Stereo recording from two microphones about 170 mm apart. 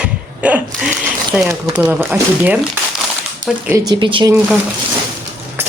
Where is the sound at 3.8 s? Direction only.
25° right (ahead or behind).